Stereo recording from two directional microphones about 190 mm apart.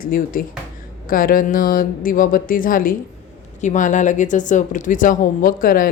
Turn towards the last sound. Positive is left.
turn(degrees=50)  # may be behind; listen again after turning